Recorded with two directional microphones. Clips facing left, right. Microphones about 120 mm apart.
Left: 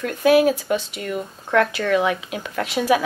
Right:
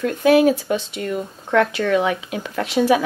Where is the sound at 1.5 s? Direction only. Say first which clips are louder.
Right 1 dB; centre (ahead or behind).